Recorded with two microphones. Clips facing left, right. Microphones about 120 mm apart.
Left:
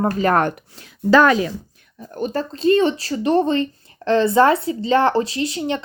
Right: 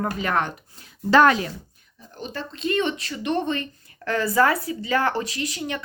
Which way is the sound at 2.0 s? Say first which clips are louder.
Left 10 dB; 50° left (ahead or behind).